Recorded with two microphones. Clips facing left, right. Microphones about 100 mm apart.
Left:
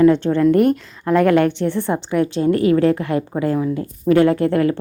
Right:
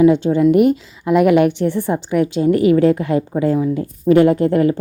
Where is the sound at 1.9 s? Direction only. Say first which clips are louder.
Right 1 dB; 45° left (ahead or behind).